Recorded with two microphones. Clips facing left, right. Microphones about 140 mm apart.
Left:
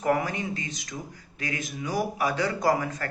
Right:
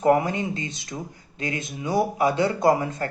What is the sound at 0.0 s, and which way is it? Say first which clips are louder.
Speech: right 6 dB; 25° right (ahead or behind).